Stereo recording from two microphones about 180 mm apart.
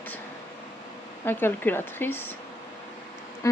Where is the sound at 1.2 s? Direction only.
10° left (ahead or behind).